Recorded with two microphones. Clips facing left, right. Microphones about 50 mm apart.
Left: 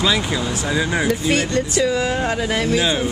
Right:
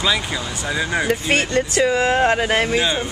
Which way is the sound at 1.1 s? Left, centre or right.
Right.